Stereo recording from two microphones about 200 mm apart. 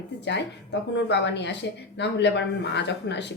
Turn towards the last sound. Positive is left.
turn(degrees=60)  # may be behind; listen again after turning